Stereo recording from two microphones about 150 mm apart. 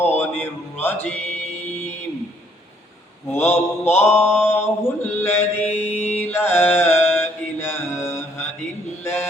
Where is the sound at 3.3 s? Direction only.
15° left (ahead or behind).